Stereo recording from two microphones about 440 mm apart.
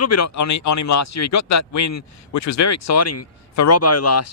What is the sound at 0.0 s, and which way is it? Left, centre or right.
Speech, left.